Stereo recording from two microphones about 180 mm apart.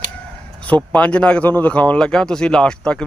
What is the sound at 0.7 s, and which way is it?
Speech, 5° left (ahead or behind).